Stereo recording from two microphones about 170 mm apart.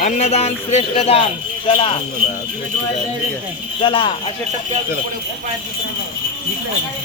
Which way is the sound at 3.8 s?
30° left (ahead or behind).